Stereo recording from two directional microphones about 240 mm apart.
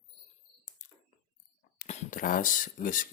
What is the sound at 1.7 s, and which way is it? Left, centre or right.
Speech, left.